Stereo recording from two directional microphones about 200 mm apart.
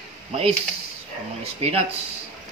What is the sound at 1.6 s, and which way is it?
Speech, 30° right (ahead or behind).